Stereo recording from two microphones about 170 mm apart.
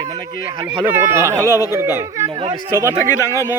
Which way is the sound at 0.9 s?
15° right (ahead or behind).